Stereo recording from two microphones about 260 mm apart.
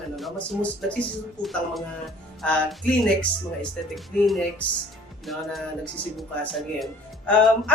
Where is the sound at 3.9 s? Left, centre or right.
Centre.